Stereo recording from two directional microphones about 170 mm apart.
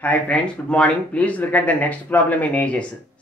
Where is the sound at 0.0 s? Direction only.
5° left (ahead or behind).